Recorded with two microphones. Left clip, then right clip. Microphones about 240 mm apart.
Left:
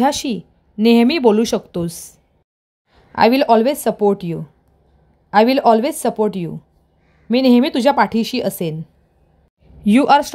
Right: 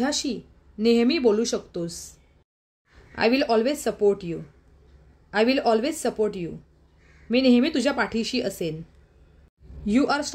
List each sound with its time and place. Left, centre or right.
0.0 s a woman's voice: left
9.8 s speech: left